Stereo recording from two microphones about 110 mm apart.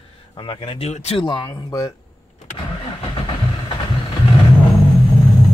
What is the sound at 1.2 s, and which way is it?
Speech, 40° left (ahead or behind).